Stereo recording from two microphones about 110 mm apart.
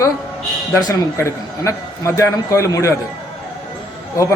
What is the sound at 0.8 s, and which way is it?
A man's voice, 30° left (ahead or behind).